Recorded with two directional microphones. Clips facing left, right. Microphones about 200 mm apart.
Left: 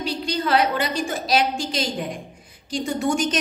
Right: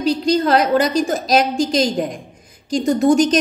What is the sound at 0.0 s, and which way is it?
A woman's voice, 40° right (ahead or behind).